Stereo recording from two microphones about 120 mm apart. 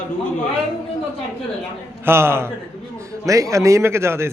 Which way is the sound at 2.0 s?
20° right (ahead or behind).